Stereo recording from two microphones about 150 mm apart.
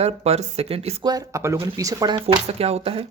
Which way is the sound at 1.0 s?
25° right (ahead or behind).